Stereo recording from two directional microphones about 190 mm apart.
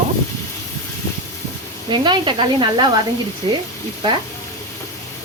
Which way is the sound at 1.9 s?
25° right (ahead or behind).